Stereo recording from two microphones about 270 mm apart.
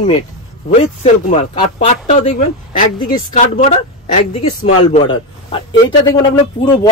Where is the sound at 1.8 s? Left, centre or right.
Left.